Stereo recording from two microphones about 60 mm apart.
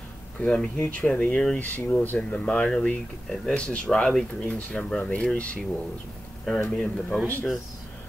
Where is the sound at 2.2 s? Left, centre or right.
Centre.